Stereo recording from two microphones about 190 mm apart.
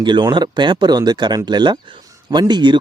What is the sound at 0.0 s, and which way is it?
Speech, 25° right (ahead or behind).